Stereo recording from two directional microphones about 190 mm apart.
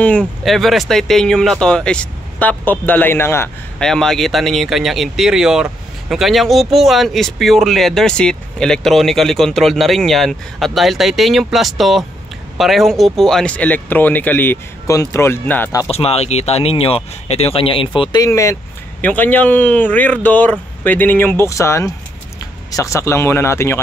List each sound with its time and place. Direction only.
0.0 s speech: 5° left (ahead or behind)
15.9 s speech: 30° left (ahead or behind); by 23.8 s 15° left (ahead or behind)